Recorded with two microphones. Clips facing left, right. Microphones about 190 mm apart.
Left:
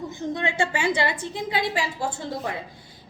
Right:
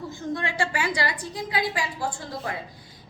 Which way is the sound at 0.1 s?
20° left (ahead or behind).